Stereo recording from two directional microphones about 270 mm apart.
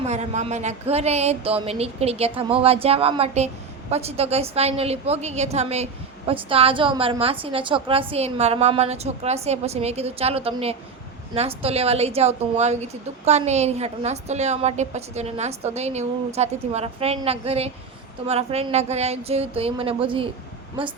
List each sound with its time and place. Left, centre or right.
0.0 s speech: right